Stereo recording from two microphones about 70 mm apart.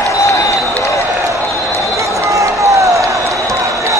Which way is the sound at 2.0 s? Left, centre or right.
Right.